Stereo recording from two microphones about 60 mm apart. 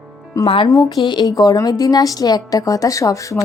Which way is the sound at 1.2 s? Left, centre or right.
Left.